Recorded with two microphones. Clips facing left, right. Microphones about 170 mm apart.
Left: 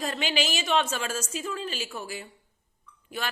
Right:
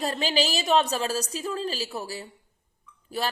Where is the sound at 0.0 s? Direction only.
35° right (ahead or behind).